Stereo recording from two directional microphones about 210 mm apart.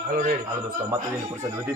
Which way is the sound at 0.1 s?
40° right (ahead or behind).